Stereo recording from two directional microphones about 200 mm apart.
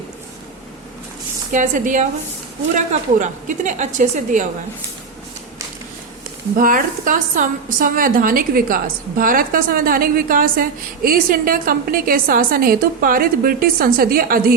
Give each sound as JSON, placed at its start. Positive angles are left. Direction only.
{"t": 1.5, "sound": "a woman's voice", "side_deg": -40}
{"t": 6.6, "sound": "a woman's voice", "side_deg": -45}